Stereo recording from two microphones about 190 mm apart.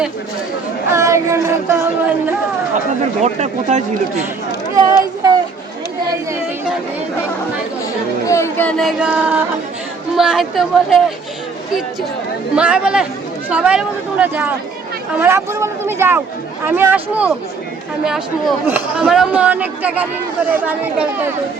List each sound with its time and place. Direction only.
0.9 s speech: 15° right (ahead or behind)
3.2 s speech: 40° right (ahead or behind)
4.7 s speech: 20° right (ahead or behind)
8.3 s speech: 10° left (ahead or behind)
12.5 s speech: 5° right (ahead or behind)